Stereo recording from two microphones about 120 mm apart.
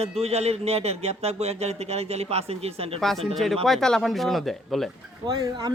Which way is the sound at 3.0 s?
5° left (ahead or behind).